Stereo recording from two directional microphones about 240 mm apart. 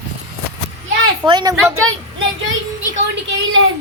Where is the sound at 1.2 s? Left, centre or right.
Centre.